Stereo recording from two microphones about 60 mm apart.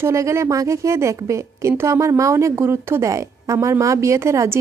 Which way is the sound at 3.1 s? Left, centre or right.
Right.